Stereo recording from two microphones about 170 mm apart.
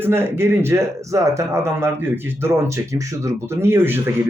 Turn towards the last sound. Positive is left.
turn(degrees=-15)  # may be behind; listen again after turning